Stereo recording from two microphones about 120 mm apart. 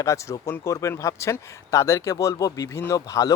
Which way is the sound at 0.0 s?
25° left (ahead or behind).